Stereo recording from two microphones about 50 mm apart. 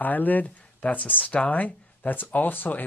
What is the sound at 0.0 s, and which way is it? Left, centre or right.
Speech, left.